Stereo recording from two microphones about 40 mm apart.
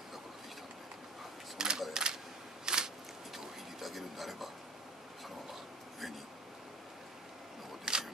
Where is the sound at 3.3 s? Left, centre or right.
Centre.